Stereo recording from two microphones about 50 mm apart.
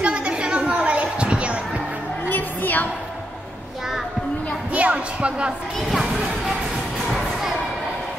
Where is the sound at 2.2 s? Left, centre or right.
Left.